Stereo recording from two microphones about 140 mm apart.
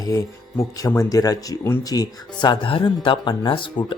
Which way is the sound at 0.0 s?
25° left (ahead or behind).